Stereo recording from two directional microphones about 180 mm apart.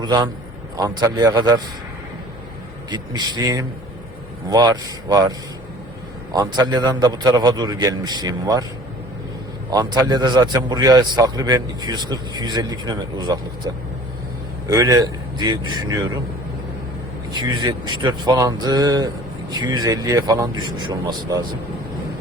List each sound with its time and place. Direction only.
0.0 s a man's voice: 25° right (ahead or behind)
2.9 s a man's voice: 20° right (ahead or behind)
6.3 s a man's voice: 20° right (ahead or behind)
9.6 s a man's voice: 20° right (ahead or behind)
14.7 s a man's voice: 20° right (ahead or behind)
17.6 s a man's voice: 25° right (ahead or behind)